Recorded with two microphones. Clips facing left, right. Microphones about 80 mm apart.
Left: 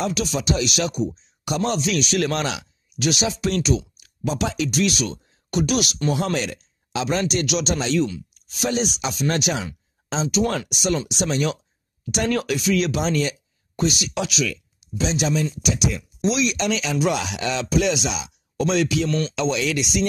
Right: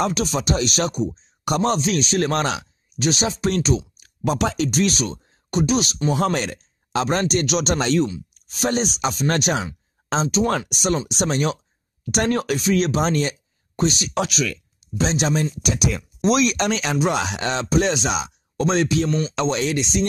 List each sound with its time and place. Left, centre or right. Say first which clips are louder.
0.1 s speech: right 1 dB; right
4.2 s speech: right 3 dB; right
6.1 s speech: right 2 dB; right
12.0 s speech: right 2 dB; right
12.3 s speech: even; right
19.0 s speech: right 1 dB; centre
19.3 s speech: right 1 dB; right